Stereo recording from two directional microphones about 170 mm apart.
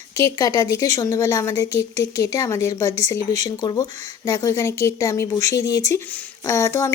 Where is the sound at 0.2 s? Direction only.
20° left (ahead or behind).